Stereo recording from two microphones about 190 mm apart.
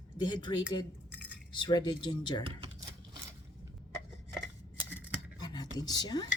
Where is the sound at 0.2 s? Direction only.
25° left (ahead or behind).